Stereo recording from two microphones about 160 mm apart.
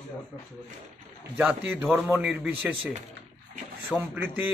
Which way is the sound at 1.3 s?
10° right (ahead or behind).